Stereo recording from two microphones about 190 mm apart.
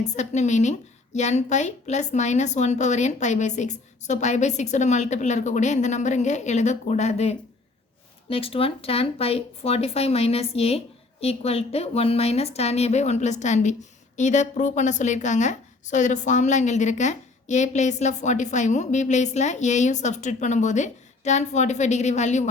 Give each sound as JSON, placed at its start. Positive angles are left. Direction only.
{"t": 0.0, "sound": "a woman's voice", "side_deg": 35}